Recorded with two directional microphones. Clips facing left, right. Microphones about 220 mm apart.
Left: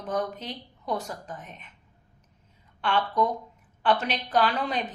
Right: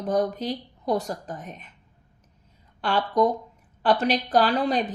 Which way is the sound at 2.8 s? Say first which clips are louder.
Right 4 dB; 40° right (ahead or behind).